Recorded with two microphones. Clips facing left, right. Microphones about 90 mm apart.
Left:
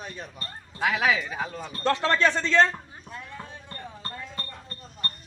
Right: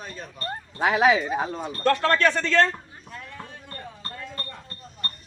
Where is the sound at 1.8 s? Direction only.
20° left (ahead or behind).